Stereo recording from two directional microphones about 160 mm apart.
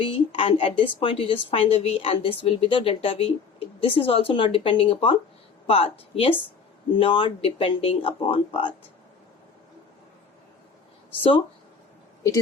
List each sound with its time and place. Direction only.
0.0 s a woman's voice: 35° left (ahead or behind)
11.1 s a woman's voice: 35° left (ahead or behind)